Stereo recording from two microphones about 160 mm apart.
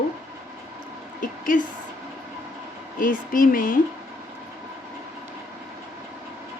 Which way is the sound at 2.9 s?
60° left (ahead or behind).